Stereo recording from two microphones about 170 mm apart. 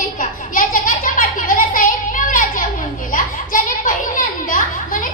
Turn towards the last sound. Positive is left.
turn(degrees=50)  # may be behind; listen again after turning